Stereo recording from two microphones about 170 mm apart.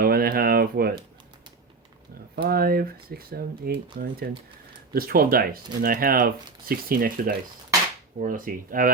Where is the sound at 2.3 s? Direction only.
60° right (ahead or behind).